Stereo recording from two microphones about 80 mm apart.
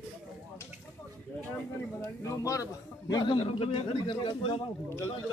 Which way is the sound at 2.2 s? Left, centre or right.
Left.